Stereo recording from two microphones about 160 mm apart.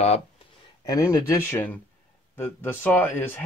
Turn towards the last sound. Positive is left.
turn(degrees=10)  # may be behind; listen again after turning